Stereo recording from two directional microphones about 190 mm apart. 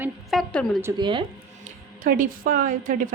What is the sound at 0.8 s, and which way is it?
Speech, 20° right (ahead or behind).